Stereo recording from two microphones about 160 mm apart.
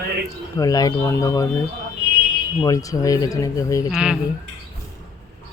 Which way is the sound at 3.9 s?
5° right (ahead or behind).